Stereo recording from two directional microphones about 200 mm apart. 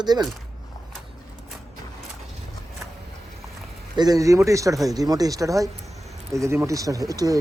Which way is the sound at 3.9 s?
20° right (ahead or behind).